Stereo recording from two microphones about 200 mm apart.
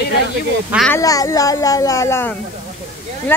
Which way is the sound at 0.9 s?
15° left (ahead or behind).